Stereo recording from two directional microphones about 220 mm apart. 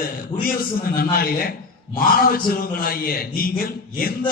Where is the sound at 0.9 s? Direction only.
45° left (ahead or behind).